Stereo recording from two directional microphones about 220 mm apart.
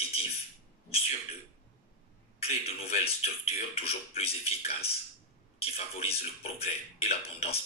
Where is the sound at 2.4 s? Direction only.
25° left (ahead or behind).